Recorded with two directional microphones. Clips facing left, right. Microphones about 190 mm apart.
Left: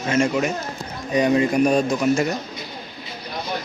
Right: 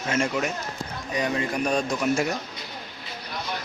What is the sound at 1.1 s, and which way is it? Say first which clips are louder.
A man's voice: left 9 dB; 20° left (ahead or behind).